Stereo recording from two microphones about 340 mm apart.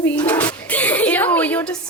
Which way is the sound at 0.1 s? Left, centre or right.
Centre.